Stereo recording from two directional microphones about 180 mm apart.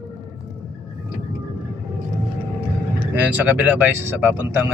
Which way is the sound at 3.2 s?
10° right (ahead or behind).